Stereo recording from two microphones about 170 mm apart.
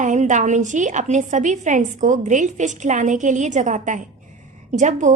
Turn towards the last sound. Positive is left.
turn(degrees=-45)  # may be behind; listen again after turning